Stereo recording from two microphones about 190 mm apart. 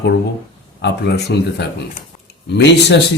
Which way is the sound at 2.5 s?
65° left (ahead or behind).